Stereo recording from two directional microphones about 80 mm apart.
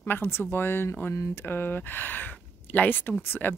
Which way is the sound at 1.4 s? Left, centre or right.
Left.